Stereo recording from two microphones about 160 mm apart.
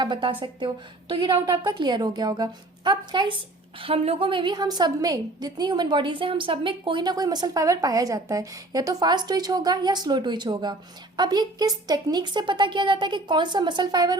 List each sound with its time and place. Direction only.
0.0 s a woman's voice: 30° right (ahead or behind)